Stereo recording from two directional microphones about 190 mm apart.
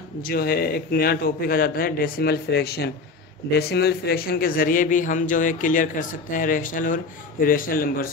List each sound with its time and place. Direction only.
0.3 s a man's voice: 55° left (ahead or behind)